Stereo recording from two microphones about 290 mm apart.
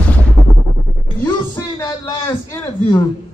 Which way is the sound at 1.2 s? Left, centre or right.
Centre.